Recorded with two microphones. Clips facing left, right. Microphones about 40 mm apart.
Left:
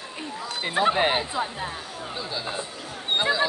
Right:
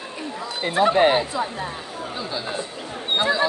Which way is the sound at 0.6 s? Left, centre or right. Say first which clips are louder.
Right 5 dB; centre.